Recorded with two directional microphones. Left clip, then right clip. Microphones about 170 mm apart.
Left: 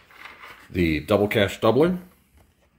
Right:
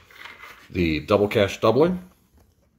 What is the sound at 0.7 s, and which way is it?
Speech, 20° left (ahead or behind).